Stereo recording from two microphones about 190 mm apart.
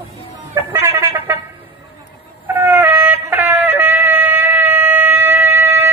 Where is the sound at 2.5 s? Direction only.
10° right (ahead or behind).